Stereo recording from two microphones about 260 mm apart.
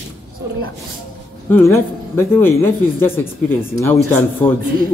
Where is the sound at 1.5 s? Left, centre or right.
Centre.